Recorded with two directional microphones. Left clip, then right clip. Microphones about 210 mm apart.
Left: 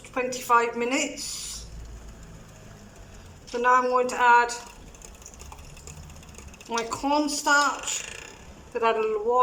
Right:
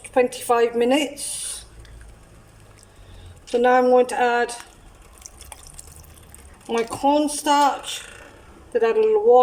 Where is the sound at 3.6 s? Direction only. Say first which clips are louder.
Right 5 dB; 15° right (ahead or behind).